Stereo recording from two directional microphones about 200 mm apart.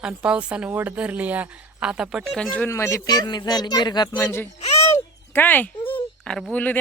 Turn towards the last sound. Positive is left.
turn(degrees=10)  # may be behind; listen again after turning